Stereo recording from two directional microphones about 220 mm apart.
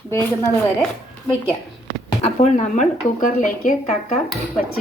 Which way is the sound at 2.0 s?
30° left (ahead or behind).